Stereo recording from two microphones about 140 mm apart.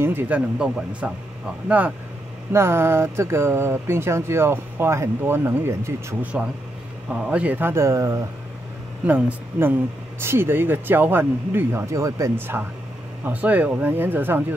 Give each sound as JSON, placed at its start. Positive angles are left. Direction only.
{"t": 0.0, "sound": "speech", "side_deg": -15}
{"t": 2.5, "sound": "speech", "side_deg": -20}
{"t": 6.3, "sound": "speech", "side_deg": -5}